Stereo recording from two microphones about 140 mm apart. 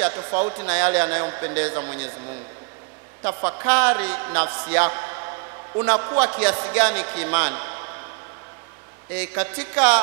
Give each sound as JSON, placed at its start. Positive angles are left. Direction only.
{"t": 0.0, "sound": "a man's voice", "side_deg": -20}
{"t": 9.1, "sound": "a man's voice", "side_deg": -20}